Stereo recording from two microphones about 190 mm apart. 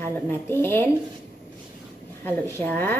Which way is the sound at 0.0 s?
10° left (ahead or behind).